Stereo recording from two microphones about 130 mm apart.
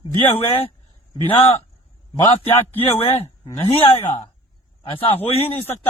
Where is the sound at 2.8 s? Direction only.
50° left (ahead or behind).